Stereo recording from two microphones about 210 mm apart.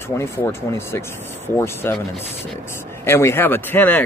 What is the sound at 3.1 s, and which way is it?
Speech, 10° left (ahead or behind).